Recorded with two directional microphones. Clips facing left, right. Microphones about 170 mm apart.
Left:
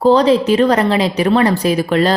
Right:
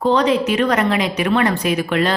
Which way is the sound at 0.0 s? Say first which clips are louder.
Left 5 dB; 35° left (ahead or behind).